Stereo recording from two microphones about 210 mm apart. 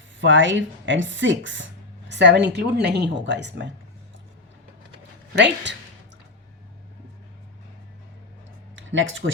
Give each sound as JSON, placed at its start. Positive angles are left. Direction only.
{"t": 0.2, "sound": "speech", "side_deg": -60}
{"t": 5.3, "sound": "speech", "side_deg": -55}
{"t": 8.7, "sound": "a sound", "side_deg": -65}